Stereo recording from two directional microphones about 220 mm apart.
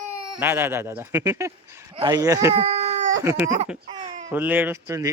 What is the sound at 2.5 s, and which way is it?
Baby cry, 30° right (ahead or behind).